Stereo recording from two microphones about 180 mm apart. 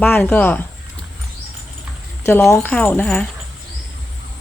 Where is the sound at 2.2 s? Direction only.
15° left (ahead or behind).